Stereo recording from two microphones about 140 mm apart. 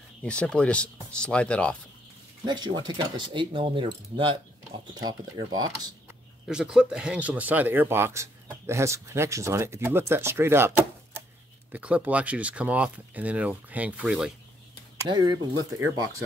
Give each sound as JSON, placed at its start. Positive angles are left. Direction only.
{"t": 0.2, "sound": "speech", "side_deg": 5}
{"t": 2.4, "sound": "speech", "side_deg": -30}
{"t": 6.4, "sound": "speech", "side_deg": -5}
{"t": 15.0, "sound": "speech", "side_deg": -30}